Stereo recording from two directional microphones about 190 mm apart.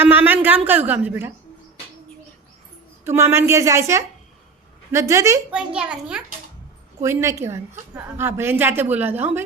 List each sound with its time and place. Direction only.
0.0 s a woman's voice: 10° right (ahead or behind)
3.0 s a woman's voice: 15° right (ahead or behind)
5.5 s a child's voice: 5° right (ahead or behind)